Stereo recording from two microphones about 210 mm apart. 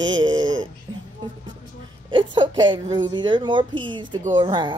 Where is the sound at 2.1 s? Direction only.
20° right (ahead or behind).